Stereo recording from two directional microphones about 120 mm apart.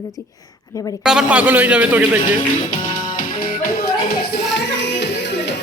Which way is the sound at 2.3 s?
90° left.